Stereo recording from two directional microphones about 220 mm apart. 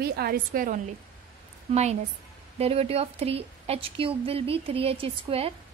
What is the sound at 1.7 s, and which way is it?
A woman's voice, 30° right (ahead or behind).